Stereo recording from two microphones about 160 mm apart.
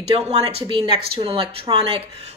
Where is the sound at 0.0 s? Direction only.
40° right (ahead or behind).